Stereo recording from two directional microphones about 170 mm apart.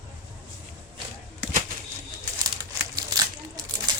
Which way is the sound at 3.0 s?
25° right (ahead or behind).